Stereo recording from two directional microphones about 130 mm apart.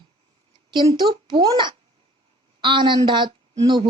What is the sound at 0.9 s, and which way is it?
A child's voice, 35° right (ahead or behind).